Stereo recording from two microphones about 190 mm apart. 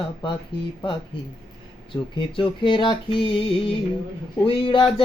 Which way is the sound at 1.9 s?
20° left (ahead or behind).